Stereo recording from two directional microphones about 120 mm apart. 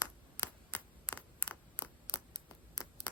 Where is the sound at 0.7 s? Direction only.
15° left (ahead or behind).